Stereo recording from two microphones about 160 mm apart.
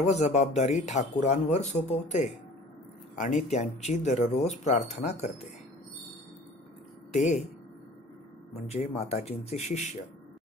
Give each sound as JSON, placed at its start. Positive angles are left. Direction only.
{"t": 0.0, "sound": "speech", "side_deg": 45}
{"t": 7.1, "sound": "speech", "side_deg": 45}
{"t": 8.6, "sound": "speech", "side_deg": 40}